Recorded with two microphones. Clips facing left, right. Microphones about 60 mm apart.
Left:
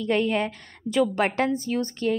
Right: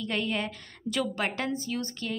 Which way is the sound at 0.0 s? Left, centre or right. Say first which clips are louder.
Left 7 dB; left.